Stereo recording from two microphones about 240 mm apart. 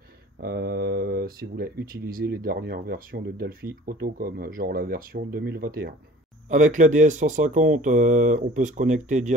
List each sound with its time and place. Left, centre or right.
0.4 s speech: right